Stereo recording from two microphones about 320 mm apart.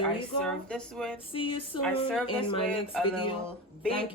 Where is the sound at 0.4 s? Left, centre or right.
Centre.